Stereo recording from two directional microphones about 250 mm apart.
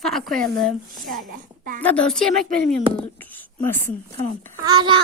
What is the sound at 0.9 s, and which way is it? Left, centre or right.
Speech, right.